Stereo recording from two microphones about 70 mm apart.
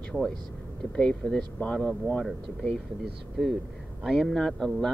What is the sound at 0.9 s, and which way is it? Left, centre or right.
Speech, centre.